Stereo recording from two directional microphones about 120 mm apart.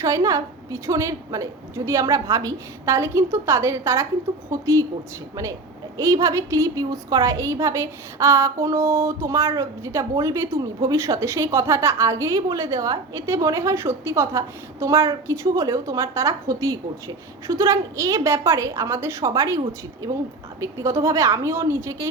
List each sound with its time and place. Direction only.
0.0 s a woman's voice: 30° right (ahead or behind)
6.0 s a woman's voice: 25° right (ahead or behind)